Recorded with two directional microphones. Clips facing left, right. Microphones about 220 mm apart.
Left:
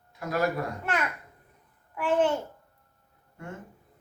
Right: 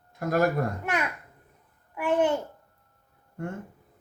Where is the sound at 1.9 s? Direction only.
10° right (ahead or behind).